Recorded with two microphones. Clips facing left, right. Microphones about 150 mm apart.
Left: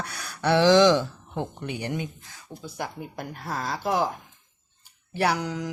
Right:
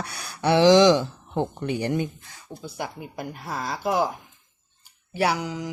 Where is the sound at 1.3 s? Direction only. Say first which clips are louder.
Right 6 dB; 35° right (ahead or behind).